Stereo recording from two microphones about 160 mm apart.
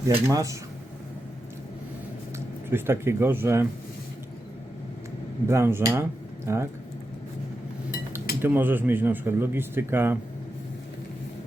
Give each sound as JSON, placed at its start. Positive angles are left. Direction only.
{"t": 0.1, "sound": "speech", "side_deg": -20}
{"t": 2.6, "sound": "speech", "side_deg": -15}
{"t": 5.5, "sound": "speech", "side_deg": -15}
{"t": 8.4, "sound": "speech", "side_deg": -15}